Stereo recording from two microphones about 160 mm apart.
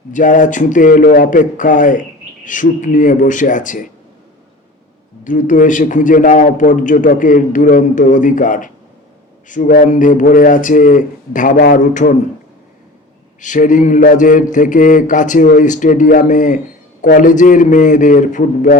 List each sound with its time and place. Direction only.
0.1 s a man's voice: 55° left (ahead or behind)
5.2 s a man's voice: 55° left (ahead or behind)
13.4 s a man's voice: 50° left (ahead or behind)